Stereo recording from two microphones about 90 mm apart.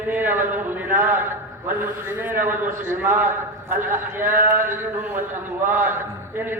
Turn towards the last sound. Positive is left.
turn(degrees=-20)  # may be behind; listen again after turning